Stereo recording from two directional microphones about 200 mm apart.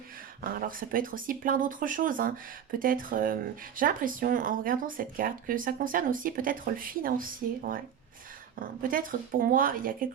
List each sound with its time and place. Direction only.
0.4 s speech: 45° right (ahead or behind)